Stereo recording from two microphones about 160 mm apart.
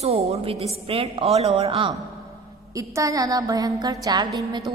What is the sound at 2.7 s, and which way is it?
A woman's voice, 20° right (ahead or behind).